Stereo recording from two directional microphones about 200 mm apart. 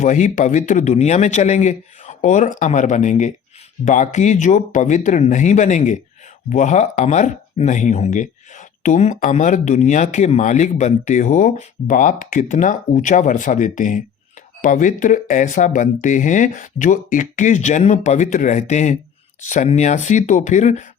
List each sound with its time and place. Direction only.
0.0 s speech: 40° left (ahead or behind)